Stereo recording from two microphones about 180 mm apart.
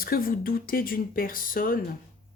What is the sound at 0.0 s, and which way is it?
Speech, 55° left (ahead or behind).